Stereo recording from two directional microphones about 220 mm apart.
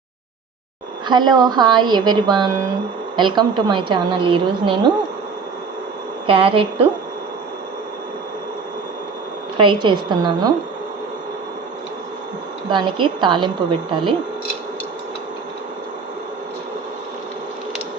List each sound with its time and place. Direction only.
1.0 s a woman's voice: 20° right (ahead or behind)
6.2 s a woman's voice: 25° right (ahead or behind)
9.6 s a woman's voice: 20° right (ahead or behind)
12.7 s a woman's voice: 20° right (ahead or behind)